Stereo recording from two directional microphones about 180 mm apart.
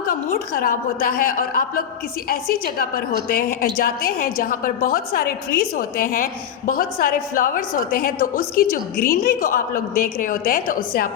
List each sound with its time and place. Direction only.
0.1 s a woman's voice: 50° left (ahead or behind)